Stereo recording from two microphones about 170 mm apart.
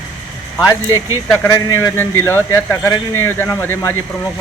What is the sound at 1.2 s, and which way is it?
A man's voice, 15° left (ahead or behind).